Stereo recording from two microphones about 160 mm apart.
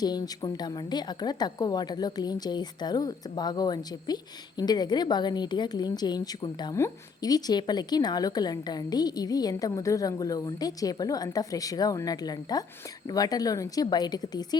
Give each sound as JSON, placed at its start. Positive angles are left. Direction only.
{"t": 0.0, "sound": "a woman's voice", "side_deg": 25}